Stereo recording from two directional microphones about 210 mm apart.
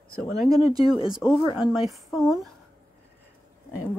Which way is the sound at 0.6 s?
25° left (ahead or behind).